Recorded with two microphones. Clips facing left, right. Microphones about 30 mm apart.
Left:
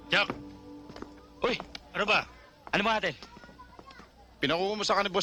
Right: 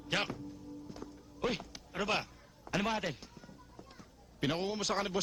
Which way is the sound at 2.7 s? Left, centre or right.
Left.